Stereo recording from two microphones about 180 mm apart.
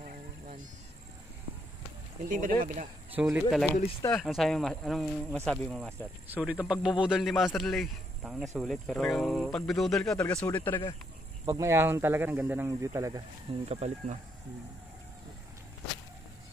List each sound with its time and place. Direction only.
0.0 s a sound: 45° right (ahead or behind)
2.2 s speech: 50° right (ahead or behind)
3.2 s speech: 10° right (ahead or behind); by 10.8 s 10° left (ahead or behind)
11.4 s speech: 15° right (ahead or behind)
13.7 s speech: 40° right (ahead or behind)